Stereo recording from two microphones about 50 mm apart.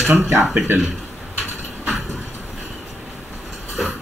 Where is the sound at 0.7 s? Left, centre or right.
Right.